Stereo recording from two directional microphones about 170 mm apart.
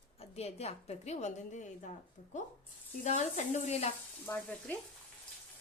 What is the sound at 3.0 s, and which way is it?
Sizzle, 45° left (ahead or behind).